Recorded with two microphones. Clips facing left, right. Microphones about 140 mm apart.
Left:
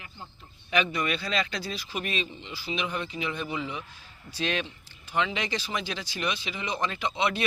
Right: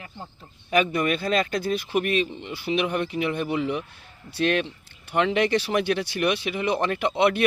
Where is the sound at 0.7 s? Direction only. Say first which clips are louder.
Right 5 dB; 50° right (ahead or behind).